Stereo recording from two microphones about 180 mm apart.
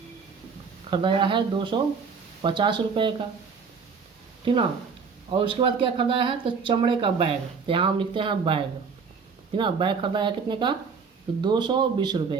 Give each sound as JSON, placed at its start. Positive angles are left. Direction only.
{"t": 0.9, "sound": "speech", "side_deg": -30}
{"t": 4.5, "sound": "speech", "side_deg": -30}